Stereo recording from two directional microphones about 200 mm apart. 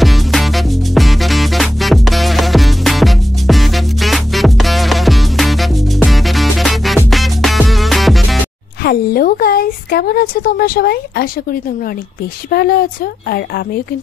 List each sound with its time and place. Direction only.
0.0 s music: centre (ahead or behind)
8.8 s speech: 50° left (ahead or behind)
12.4 s speech: 50° left (ahead or behind)